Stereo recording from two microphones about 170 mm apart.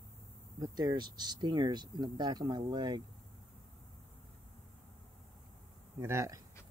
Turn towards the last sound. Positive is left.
turn(degrees=-20)  # may be behind; listen again after turning